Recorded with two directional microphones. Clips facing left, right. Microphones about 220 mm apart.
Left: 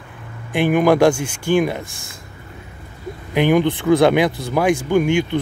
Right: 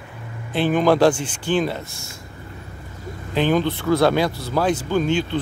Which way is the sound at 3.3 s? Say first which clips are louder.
Left 4 dB; 15° left (ahead or behind).